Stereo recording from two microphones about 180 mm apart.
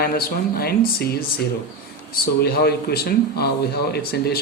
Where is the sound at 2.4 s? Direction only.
60° left (ahead or behind).